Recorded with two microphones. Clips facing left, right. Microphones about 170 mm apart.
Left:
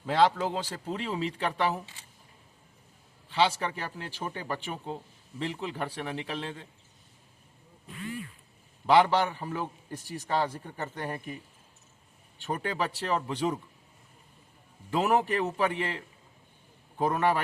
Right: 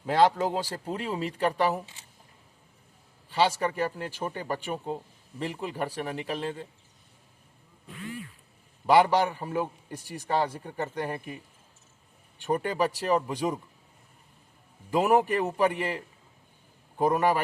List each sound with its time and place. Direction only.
0.1 s speech: 50° right (ahead or behind)
0.5 s a man's voice: 10° right (ahead or behind)
3.2 s a man's voice: 10° right (ahead or behind)
8.9 s a man's voice: 10° right (ahead or behind)
12.4 s a man's voice: 15° right (ahead or behind)
14.8 s a man's voice: 10° right (ahead or behind)
17.0 s a man's voice: 10° right (ahead or behind)